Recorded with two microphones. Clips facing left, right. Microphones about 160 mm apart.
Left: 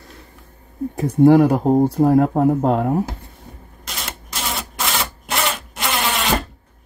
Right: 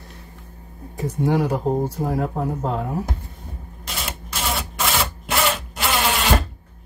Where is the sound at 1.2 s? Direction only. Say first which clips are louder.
Left 9 dB; 60° left (ahead or behind).